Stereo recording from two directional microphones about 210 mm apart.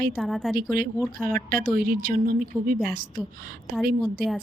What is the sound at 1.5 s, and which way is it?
A woman's voice, 40° right (ahead or behind).